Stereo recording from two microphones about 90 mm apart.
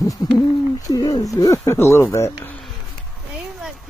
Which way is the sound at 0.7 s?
40° left (ahead or behind).